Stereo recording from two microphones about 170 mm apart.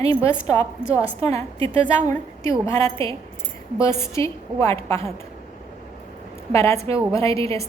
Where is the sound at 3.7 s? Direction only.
15° left (ahead or behind).